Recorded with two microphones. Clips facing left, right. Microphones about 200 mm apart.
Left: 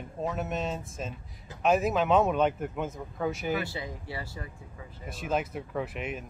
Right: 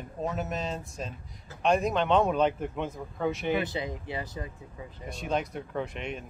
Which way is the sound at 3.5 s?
20° right (ahead or behind).